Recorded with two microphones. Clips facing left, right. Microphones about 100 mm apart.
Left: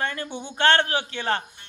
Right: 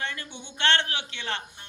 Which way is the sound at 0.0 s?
45° left (ahead or behind).